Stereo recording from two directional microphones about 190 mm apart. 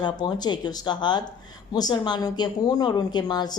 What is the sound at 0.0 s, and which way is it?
Speech, 20° left (ahead or behind).